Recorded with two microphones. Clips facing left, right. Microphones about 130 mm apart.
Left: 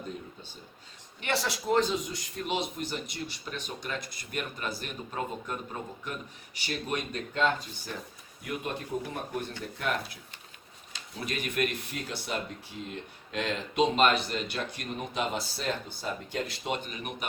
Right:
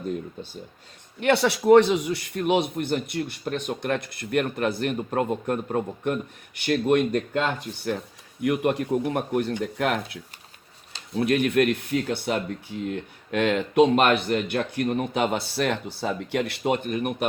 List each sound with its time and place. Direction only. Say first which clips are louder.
1.2 s speech: right 11 dB; 65° right (ahead or behind)
7.9 s speech: right 12 dB; 75° right (ahead or behind)
11.2 s speech: right 11 dB; 60° right (ahead or behind)